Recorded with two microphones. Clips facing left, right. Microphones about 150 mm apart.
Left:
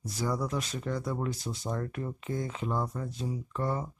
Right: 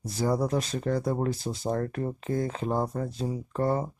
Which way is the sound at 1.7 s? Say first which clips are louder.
Right 6 dB; 45° right (ahead or behind).